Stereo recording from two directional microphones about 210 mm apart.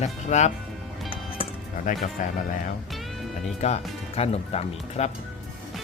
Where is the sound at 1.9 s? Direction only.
40° left (ahead or behind).